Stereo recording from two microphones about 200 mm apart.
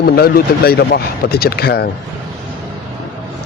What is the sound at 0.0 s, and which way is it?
A man's voice, 50° left (ahead or behind).